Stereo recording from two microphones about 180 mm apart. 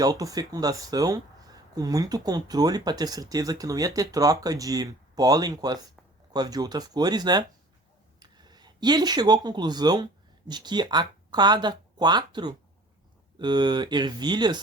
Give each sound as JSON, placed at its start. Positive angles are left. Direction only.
{"t": 0.0, "sound": "speech", "side_deg": -20}